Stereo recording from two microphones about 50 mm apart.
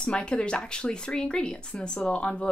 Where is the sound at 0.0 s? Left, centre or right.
Centre.